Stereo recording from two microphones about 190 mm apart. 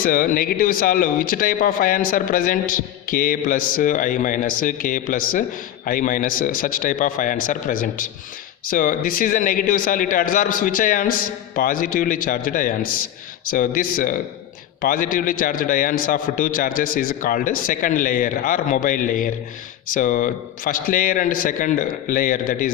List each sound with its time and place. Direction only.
0.0 s speech: 50° left (ahead or behind)